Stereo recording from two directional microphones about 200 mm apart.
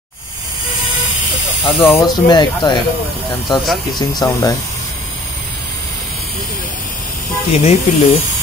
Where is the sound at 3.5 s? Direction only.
Centre (ahead or behind).